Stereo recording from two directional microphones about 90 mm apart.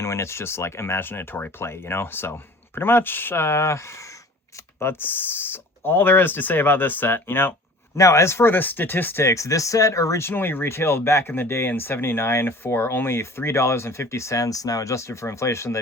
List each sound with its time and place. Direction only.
0.0 s speech: 30° left (ahead or behind)
7.9 s speech: 35° left (ahead or behind)